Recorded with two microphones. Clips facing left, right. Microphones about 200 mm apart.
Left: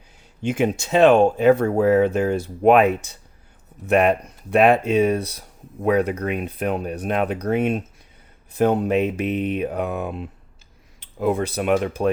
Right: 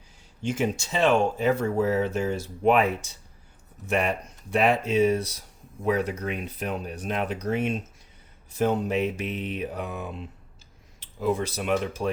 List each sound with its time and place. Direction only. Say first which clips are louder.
0.4 s speech: left 5 dB; 60° left (ahead or behind)